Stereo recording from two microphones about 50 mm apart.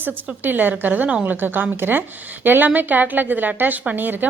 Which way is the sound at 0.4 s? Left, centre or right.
Right.